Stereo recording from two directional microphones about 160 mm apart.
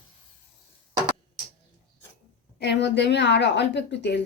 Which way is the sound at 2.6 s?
90° left.